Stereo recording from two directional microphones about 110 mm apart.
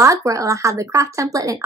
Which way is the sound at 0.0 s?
30° right (ahead or behind).